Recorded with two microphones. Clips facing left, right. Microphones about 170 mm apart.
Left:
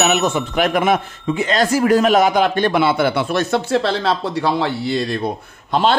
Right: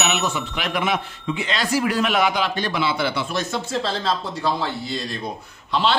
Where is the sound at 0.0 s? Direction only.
45° left (ahead or behind).